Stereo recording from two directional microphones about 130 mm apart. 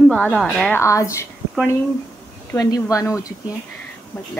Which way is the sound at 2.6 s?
30° left (ahead or behind).